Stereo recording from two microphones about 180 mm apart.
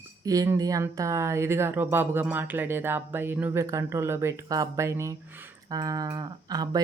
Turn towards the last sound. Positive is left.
turn(degrees=-20)  # may be behind; listen again after turning